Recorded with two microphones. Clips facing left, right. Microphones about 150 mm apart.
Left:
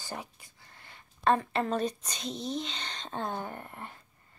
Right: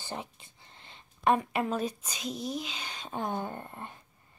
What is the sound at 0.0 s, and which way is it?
Speech, 20° right (ahead or behind).